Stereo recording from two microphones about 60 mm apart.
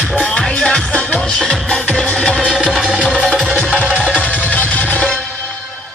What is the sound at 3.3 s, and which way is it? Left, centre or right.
Music, centre.